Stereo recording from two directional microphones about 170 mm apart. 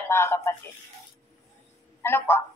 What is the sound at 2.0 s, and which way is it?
Speech, 15° left (ahead or behind).